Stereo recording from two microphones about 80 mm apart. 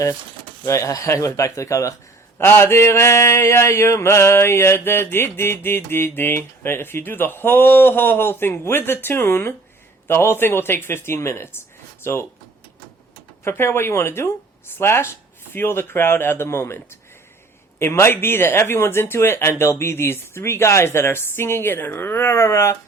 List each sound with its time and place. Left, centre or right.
0.6 s speech: left
2.4 s mantra: left
10.1 s speech: left
13.4 s speech: left